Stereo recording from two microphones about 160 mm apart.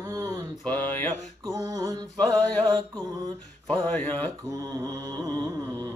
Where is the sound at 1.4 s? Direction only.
20° right (ahead or behind).